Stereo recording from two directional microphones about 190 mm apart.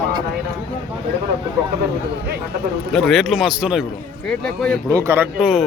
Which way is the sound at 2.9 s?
Centre (ahead or behind).